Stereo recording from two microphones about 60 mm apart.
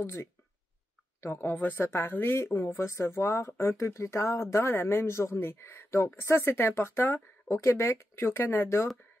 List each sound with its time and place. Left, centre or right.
0.0 s speech: left
1.3 s speech: left